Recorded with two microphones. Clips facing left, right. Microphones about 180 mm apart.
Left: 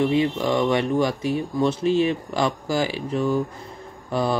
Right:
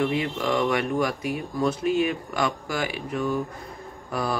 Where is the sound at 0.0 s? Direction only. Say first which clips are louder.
Left 4 dB; 25° left (ahead or behind).